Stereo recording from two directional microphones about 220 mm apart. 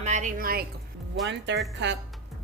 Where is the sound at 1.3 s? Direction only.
55° right (ahead or behind).